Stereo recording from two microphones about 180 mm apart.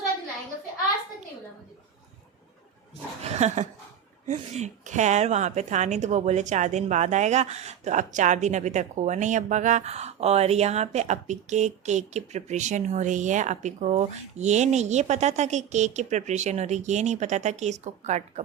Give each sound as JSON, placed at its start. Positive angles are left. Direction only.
{"t": 3.2, "sound": "dog", "side_deg": -40}
{"t": 4.3, "sound": "a woman's voice", "side_deg": -40}